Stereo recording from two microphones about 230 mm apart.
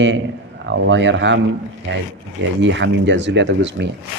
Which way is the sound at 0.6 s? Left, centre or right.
Right.